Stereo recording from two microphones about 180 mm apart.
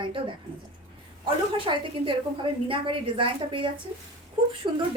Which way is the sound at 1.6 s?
30° right (ahead or behind).